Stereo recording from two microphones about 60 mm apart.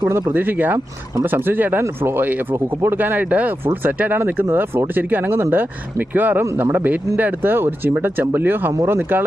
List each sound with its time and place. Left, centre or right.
0.0 s speech: right